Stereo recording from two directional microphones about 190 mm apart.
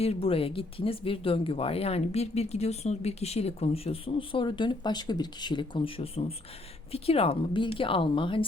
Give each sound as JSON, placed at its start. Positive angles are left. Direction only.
{"t": 0.0, "sound": "speech", "side_deg": 30}